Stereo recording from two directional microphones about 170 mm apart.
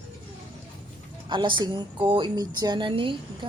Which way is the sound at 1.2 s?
30° right (ahead or behind).